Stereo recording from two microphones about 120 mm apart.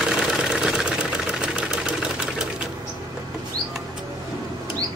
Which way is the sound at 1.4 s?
5° right (ahead or behind).